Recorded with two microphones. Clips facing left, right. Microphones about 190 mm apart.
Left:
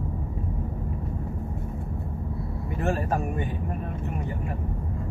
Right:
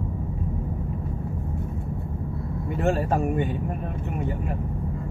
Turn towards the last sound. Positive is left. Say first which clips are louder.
# right 4 dB
turn(degrees=-25)  # may be behind; listen again after turning